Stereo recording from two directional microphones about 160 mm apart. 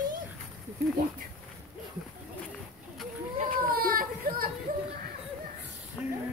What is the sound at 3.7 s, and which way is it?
Baby cry, 65° right (ahead or behind).